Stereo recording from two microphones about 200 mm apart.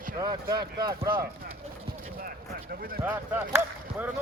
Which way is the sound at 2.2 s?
50° right (ahead or behind).